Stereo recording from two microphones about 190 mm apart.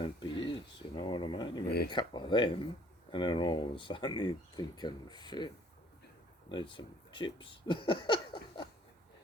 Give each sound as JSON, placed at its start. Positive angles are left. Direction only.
{"t": 0.0, "sound": "a sound", "side_deg": 25}
{"t": 1.6, "sound": "speech", "side_deg": 60}
{"t": 1.9, "sound": "speech", "side_deg": 25}
{"t": 6.5, "sound": "speech", "side_deg": 25}